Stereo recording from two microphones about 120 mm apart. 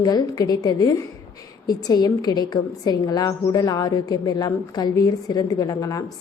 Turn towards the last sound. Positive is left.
turn(degrees=30)  # may be behind; listen again after turning